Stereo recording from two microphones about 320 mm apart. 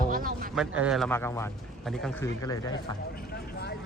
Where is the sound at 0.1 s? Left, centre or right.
Right.